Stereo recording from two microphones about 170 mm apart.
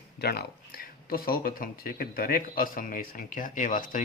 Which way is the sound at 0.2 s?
70° left (ahead or behind).